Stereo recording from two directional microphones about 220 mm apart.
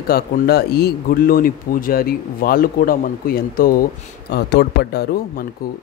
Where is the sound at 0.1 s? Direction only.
45° left (ahead or behind).